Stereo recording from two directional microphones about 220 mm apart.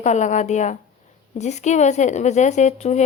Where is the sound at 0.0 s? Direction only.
35° left (ahead or behind).